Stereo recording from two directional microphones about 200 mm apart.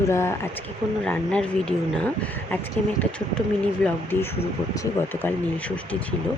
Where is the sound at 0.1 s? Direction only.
15° left (ahead or behind).